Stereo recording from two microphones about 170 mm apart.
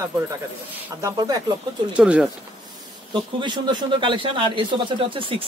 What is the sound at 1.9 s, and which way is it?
Speech, 5° right (ahead or behind).